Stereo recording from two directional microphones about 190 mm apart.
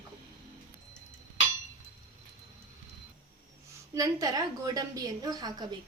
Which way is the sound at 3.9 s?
20° right (ahead or behind).